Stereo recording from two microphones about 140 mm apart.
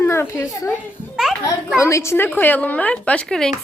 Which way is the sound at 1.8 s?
20° left (ahead or behind).